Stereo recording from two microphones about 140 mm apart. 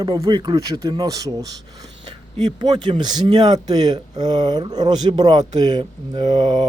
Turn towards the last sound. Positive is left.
turn(degrees=-30)  # may be behind; listen again after turning